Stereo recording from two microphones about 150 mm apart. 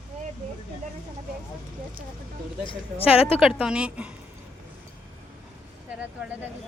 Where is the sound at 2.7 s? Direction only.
40° left (ahead or behind).